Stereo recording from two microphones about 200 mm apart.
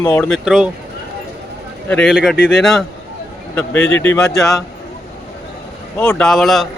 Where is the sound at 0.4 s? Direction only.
5° right (ahead or behind).